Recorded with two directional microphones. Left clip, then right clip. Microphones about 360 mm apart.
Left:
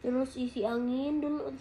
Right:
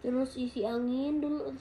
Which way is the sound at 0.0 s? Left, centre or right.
Centre.